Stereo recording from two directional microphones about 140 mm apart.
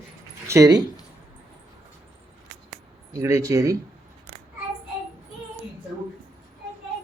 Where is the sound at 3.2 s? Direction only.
20° right (ahead or behind).